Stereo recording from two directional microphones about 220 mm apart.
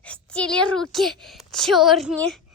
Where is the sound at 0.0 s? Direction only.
5° left (ahead or behind).